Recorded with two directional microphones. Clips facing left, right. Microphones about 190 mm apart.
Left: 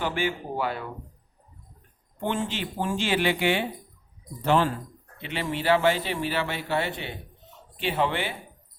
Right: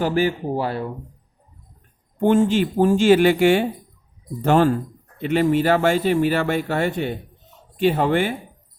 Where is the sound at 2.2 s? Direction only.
45° right (ahead or behind).